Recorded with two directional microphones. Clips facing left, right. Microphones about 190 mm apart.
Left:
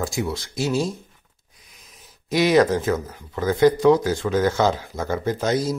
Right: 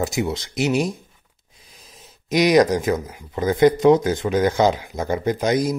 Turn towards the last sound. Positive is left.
turn(degrees=-15)  # may be behind; listen again after turning